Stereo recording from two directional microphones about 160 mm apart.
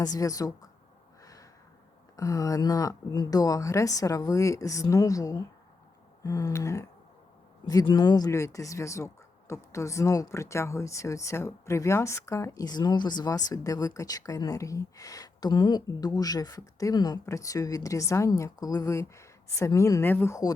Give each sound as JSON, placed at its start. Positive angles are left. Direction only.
{"t": 0.0, "sound": "speech", "side_deg": 20}
{"t": 1.2, "sound": "a sound", "side_deg": 20}
{"t": 2.1, "sound": "speech", "side_deg": 20}